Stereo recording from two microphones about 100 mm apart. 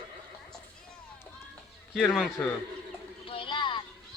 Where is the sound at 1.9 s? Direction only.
Centre (ahead or behind).